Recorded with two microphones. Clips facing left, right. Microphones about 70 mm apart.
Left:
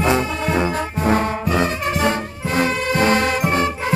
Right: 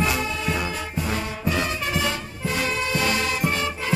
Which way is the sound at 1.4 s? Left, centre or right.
Left.